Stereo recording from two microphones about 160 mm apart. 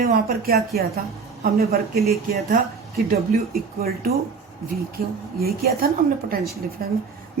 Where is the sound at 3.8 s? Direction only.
70° right (ahead or behind).